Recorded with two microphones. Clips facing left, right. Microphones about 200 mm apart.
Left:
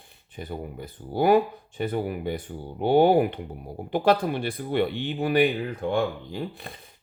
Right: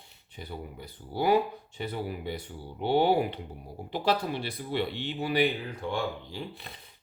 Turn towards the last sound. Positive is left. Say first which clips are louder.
# left 6 dB
turn(degrees=50)  # may be behind; listen again after turning